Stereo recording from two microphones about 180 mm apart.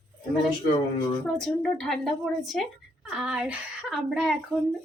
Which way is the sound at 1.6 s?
5° left (ahead or behind).